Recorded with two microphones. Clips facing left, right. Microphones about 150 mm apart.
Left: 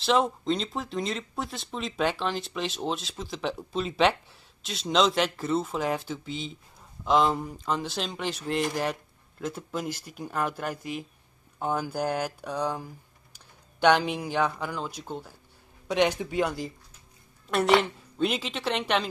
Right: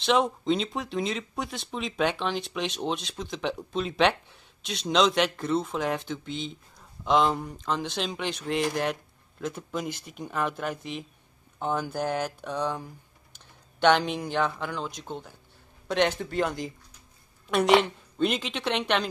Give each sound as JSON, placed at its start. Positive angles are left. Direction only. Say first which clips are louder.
{"t": 0.0, "sound": "speech", "louder": "even", "side_deg": 0}